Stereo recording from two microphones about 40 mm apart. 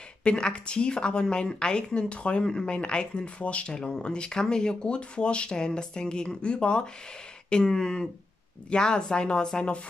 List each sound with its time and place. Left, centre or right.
0.2 s speech: left